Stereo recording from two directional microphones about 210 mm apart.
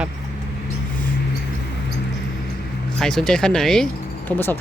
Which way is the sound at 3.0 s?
Centre (ahead or behind).